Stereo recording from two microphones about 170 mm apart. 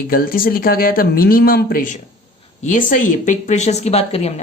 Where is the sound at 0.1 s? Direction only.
55° left (ahead or behind).